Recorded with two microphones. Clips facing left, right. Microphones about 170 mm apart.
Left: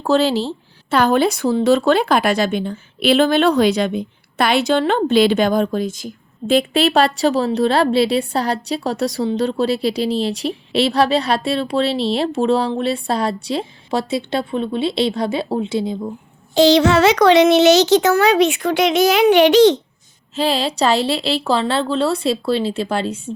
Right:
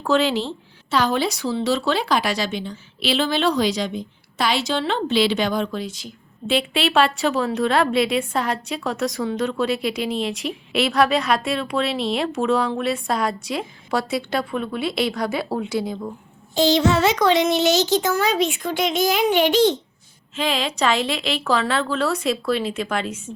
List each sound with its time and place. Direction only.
0.0 s a woman's voice: 35° left (ahead or behind)
0.9 s a woman's voice: 55° left (ahead or behind); by 16.0 s 25° left (ahead or behind)
16.6 s a child's voice: 80° left
20.3 s a woman's voice: 35° left (ahead or behind)